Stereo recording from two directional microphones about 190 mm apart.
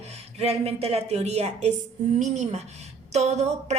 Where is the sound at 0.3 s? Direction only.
35° right (ahead or behind).